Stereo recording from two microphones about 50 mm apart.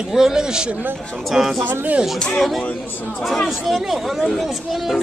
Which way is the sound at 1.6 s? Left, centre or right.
Right.